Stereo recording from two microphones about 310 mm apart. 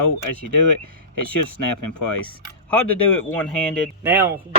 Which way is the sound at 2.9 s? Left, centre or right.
Centre.